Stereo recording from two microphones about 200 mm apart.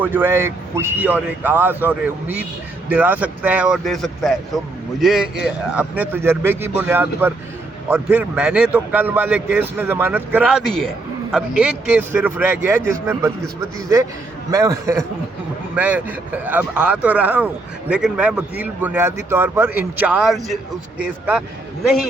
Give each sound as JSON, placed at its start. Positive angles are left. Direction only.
{"t": 0.0, "sound": "speech", "side_deg": -10}
{"t": 10.7, "sound": "speech", "side_deg": 0}
{"t": 14.5, "sound": "speech", "side_deg": -15}